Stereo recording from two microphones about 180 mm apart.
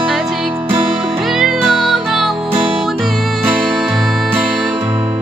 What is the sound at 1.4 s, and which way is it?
Music, centre (ahead or behind).